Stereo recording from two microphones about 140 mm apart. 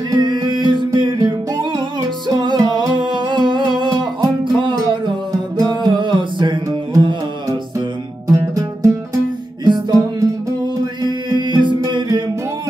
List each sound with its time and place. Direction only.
0.1 s music: 30° right (ahead or behind)